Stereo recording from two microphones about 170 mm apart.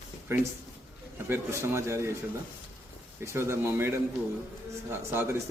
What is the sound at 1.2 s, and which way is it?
Speech, 15° right (ahead or behind).